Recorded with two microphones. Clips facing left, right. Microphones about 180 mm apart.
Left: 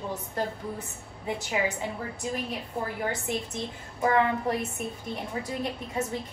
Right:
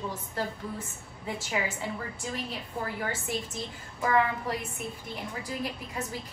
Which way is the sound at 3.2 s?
20° left (ahead or behind).